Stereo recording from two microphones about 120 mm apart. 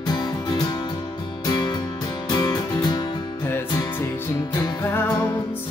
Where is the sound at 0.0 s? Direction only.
35° left (ahead or behind).